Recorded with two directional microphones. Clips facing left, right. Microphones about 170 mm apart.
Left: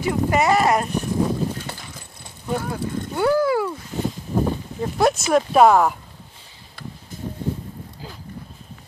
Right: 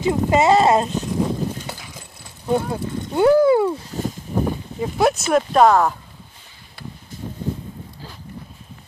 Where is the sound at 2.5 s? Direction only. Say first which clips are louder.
Right 4 dB; 25° right (ahead or behind).